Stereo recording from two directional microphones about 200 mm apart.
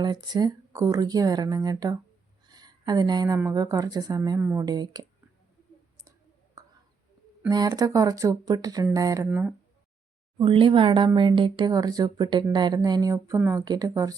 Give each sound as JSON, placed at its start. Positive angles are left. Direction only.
{"t": 0.0, "sound": "a woman's voice", "side_deg": -20}
{"t": 6.6, "sound": "whispering", "side_deg": -20}
{"t": 7.4, "sound": "speech", "side_deg": -20}
{"t": 10.3, "sound": "a woman's voice", "side_deg": -25}